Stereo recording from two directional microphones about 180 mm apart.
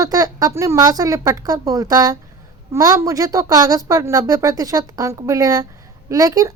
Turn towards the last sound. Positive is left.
turn(degrees=-20)  # may be behind; listen again after turning